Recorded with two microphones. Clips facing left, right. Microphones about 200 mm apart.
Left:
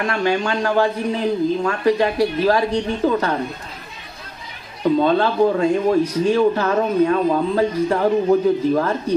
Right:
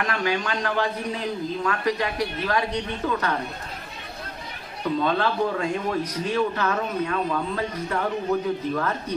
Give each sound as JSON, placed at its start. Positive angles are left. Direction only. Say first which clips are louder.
{"t": 0.0, "sound": "a man's voice", "louder": "left 6 dB", "side_deg": 30}
{"t": 5.0, "sound": "a man's voice", "louder": "left 6 dB", "side_deg": 30}